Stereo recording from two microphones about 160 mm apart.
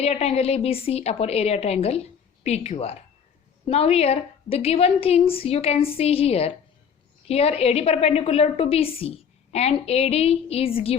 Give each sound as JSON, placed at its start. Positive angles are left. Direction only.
{"t": 0.0, "sound": "a woman's voice", "side_deg": 40}